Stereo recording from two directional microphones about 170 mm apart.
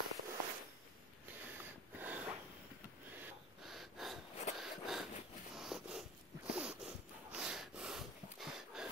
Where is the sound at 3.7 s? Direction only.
Centre (ahead or behind).